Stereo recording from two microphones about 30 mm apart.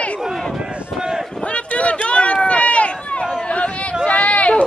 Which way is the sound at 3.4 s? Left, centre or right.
Left.